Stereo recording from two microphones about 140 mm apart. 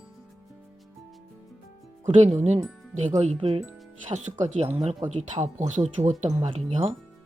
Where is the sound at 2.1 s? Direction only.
55° right (ahead or behind).